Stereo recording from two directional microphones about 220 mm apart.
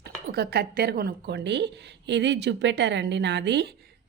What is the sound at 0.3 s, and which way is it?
A woman's voice, 45° right (ahead or behind).